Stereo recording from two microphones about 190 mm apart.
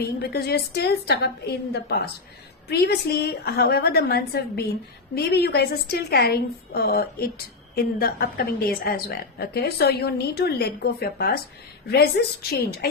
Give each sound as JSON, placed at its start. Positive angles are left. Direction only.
{"t": 0.2, "sound": "a woman's voice", "side_deg": 55}